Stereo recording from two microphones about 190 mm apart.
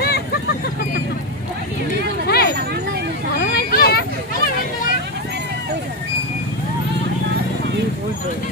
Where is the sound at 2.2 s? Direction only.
55° left (ahead or behind).